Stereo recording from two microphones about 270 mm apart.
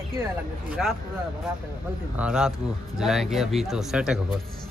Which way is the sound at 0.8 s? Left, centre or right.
Centre.